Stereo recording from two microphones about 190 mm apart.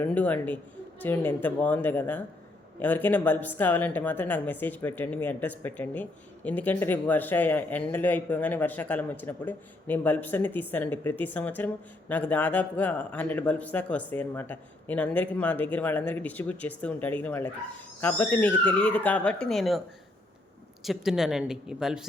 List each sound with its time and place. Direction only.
0.0 s a man's voice: 10° left (ahead or behind)
20.8 s speech: centre (ahead or behind)